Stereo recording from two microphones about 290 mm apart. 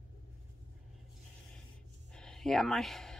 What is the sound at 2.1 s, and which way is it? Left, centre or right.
Speech, centre.